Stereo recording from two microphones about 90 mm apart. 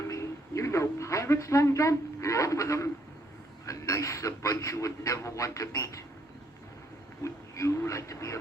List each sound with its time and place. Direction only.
0.1 s a woman's voice: 35° left (ahead or behind)
7.2 s a man's voice: 35° left (ahead or behind)